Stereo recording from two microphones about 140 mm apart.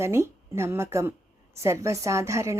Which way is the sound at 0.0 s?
20° right (ahead or behind).